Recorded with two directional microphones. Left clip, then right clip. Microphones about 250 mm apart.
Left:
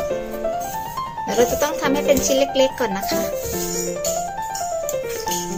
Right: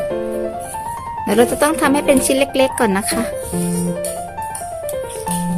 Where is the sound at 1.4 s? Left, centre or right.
Right.